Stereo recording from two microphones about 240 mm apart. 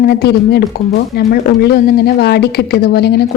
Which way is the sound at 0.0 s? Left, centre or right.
Left.